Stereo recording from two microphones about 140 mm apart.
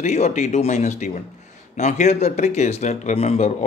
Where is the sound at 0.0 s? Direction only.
55° left (ahead or behind).